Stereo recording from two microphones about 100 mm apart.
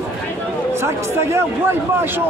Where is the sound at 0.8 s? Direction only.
25° right (ahead or behind).